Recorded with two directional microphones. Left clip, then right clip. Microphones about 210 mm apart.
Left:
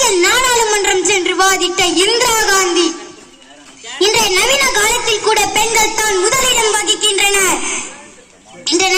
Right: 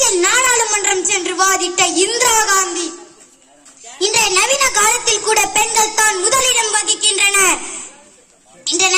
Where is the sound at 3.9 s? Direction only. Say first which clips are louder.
Left 2 dB; 45° right (ahead or behind).